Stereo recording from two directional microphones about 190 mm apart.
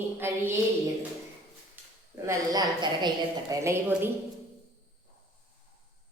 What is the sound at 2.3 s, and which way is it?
A woman's voice, 20° right (ahead or behind).